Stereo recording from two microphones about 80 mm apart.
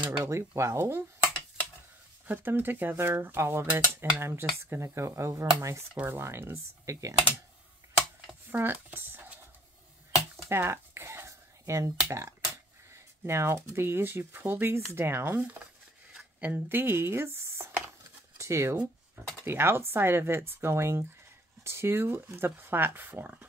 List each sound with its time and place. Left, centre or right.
0.2 s speech: right
2.2 s speech: right
8.5 s speech: right
10.5 s a sound: right
12.1 s speech: right
16.3 s speech: right